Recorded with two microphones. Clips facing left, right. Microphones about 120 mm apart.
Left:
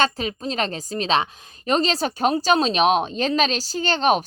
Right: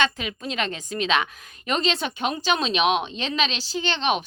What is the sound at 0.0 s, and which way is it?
A woman's voice, 35° left (ahead or behind).